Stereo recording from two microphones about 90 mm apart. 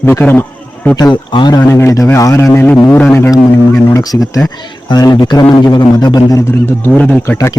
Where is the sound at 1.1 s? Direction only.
60° left (ahead or behind).